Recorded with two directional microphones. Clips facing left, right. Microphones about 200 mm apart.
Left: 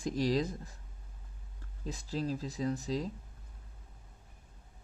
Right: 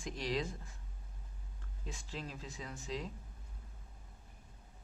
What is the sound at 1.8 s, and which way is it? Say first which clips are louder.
Speech: left 9 dB; 40° left (ahead or behind).